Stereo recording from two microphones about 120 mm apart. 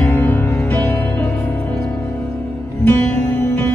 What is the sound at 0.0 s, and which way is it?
Music, 15° left (ahead or behind).